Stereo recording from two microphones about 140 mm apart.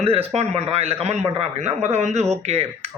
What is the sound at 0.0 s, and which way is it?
Speech, 45° right (ahead or behind).